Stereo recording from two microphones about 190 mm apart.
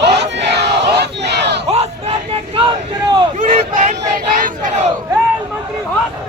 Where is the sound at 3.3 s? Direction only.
45° right (ahead or behind).